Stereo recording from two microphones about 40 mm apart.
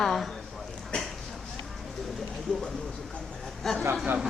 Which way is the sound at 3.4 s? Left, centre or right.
Centre.